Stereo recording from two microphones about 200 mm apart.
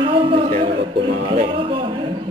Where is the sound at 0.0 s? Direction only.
25° right (ahead or behind).